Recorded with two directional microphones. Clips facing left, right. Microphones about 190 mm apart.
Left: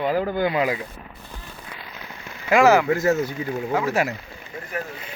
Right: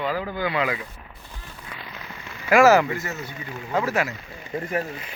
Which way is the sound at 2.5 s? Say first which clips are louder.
Even; 15° left (ahead or behind).